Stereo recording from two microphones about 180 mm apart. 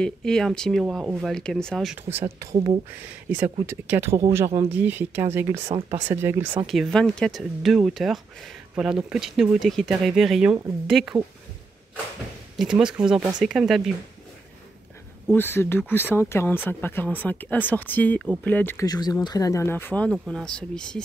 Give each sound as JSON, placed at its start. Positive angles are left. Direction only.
{"t": 0.0, "sound": "speech", "side_deg": 5}
{"t": 2.1, "sound": "speech", "side_deg": -15}
{"t": 2.5, "sound": "speech", "side_deg": -35}
{"t": 3.3, "sound": "speech", "side_deg": -10}
{"t": 6.6, "sound": "speech", "side_deg": 0}
{"t": 12.5, "sound": "speech", "side_deg": -5}
{"t": 15.3, "sound": "speech", "side_deg": 15}
{"t": 18.9, "sound": "speech", "side_deg": 20}